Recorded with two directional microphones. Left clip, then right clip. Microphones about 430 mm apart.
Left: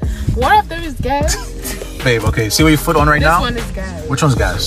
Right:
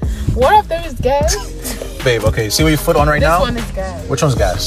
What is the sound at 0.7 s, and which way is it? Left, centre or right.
Speech, centre.